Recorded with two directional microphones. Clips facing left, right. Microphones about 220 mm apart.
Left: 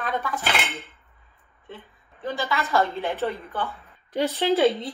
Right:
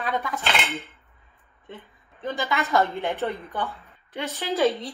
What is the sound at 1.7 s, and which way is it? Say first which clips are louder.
A woman's voice: even; 15° right (ahead or behind).